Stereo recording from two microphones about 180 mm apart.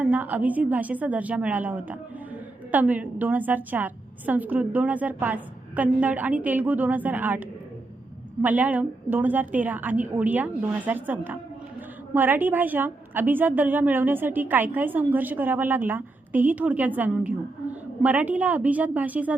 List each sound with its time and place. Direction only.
0.0 s a woman's voice: 10° right (ahead or behind)